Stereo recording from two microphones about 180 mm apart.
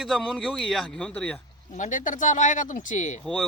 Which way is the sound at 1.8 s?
45° left (ahead or behind).